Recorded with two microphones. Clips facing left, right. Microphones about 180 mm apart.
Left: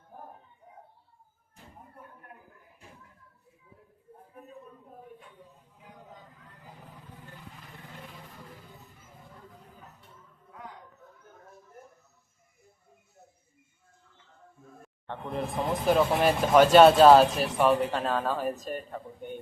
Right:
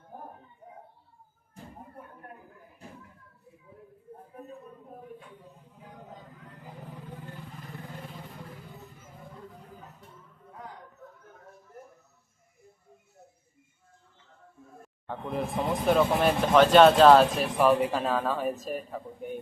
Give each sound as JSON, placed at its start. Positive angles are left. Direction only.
{"t": 15.0, "sound": "speech", "side_deg": -5}